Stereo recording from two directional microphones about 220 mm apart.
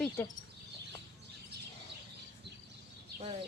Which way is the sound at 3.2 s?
30° right (ahead or behind).